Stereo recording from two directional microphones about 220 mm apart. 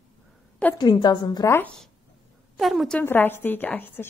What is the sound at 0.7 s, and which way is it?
Speech, 20° left (ahead or behind).